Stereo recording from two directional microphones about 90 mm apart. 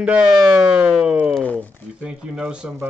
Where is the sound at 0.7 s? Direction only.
10° right (ahead or behind).